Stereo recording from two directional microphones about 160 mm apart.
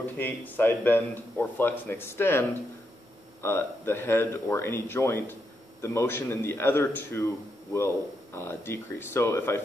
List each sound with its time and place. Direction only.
0.0 s a man's voice: 10° left (ahead or behind)
3.4 s a man's voice: 15° left (ahead or behind)